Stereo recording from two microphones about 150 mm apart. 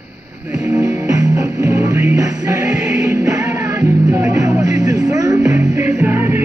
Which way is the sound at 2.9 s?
20° right (ahead or behind).